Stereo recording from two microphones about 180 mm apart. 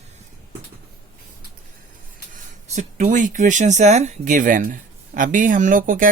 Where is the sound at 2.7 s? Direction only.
40° right (ahead or behind).